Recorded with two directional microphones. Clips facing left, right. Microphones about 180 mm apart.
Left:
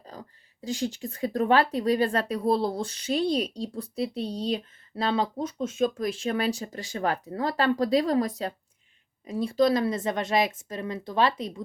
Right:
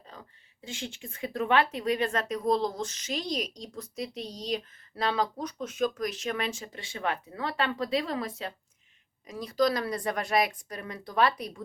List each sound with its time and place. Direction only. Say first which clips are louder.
0.0 s a woman's voice: left 5 dB; 40° left (ahead or behind)